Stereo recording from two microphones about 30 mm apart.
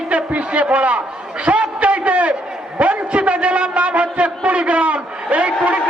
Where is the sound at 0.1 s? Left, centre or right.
Right.